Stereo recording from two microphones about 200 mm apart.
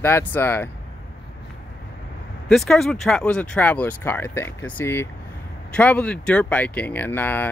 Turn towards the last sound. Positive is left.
turn(degrees=10)  # may be behind; listen again after turning